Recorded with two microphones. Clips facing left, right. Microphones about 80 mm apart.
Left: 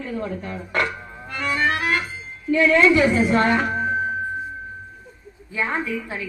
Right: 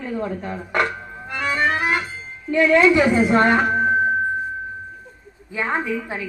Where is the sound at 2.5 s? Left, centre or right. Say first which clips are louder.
Right 1 dB; right.